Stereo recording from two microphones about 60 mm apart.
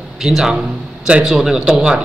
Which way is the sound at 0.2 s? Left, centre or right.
Centre.